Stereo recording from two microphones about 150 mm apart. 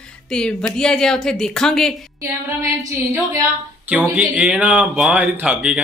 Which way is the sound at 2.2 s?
20° right (ahead or behind).